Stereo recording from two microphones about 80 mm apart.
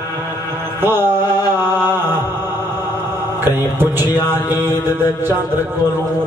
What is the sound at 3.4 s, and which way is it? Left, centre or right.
Mantra, right.